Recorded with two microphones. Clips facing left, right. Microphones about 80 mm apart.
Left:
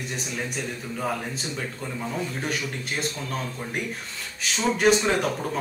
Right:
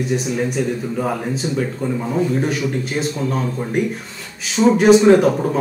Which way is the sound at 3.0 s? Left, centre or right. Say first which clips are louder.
Right 8 dB; centre.